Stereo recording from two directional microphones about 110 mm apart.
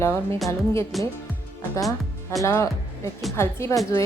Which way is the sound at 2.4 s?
25° left (ahead or behind).